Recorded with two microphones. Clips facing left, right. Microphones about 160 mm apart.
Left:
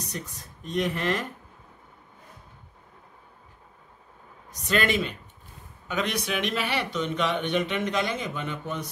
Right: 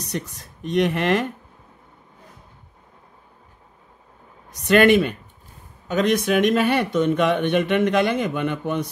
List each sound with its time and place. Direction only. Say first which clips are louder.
0.1 s speech: right 8 dB; 70° right (ahead or behind)
4.5 s speech: right 11 dB; 65° right (ahead or behind)
5.9 s speech: right 9 dB; 45° right (ahead or behind); by 8.9 s 65° right (ahead or behind)